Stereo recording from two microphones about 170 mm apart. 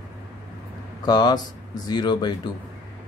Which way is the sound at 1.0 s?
25° left (ahead or behind).